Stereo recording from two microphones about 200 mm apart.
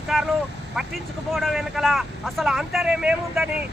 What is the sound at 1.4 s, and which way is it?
Speech, centre (ahead or behind).